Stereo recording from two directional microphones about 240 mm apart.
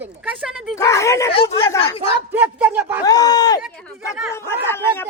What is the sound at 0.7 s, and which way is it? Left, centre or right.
Speech, centre.